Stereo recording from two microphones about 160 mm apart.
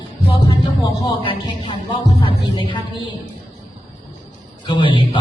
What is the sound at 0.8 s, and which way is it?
A man's voice, 30° left (ahead or behind).